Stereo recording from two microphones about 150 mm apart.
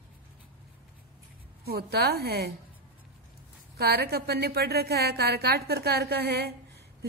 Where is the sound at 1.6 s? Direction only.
90° right.